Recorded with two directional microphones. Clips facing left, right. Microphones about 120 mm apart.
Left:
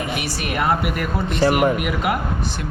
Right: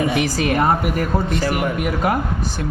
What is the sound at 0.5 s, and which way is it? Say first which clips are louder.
Speech: right 1 dB; 35° right (ahead or behind).